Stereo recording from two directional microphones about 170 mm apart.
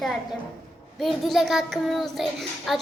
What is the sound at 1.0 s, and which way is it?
A child's voice, centre (ahead or behind).